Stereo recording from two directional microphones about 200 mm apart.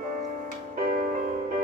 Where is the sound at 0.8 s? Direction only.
45° right (ahead or behind).